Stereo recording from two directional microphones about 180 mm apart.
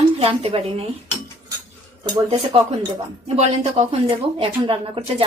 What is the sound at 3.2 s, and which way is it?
Speech, 40° right (ahead or behind).